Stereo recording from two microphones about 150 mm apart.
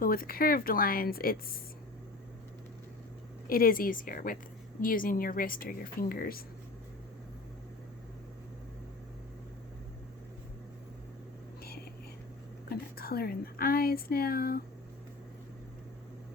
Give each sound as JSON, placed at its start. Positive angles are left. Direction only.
{"t": 0.0, "sound": "speech", "side_deg": 75}
{"t": 3.4, "sound": "speech", "side_deg": 70}
{"t": 12.6, "sound": "speech", "side_deg": 90}